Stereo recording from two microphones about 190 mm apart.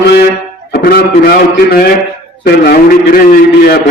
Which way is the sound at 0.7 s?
55° left (ahead or behind).